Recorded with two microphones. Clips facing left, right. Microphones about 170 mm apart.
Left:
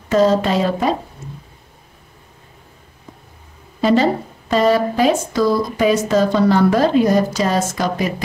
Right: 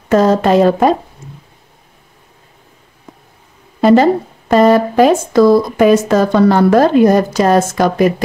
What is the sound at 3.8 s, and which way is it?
A woman's voice, 50° right (ahead or behind).